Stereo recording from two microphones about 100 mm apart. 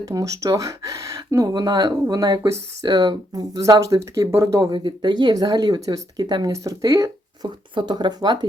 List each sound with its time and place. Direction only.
0.0 s speech: 35° right (ahead or behind)
4.7 s speech: 50° right (ahead or behind)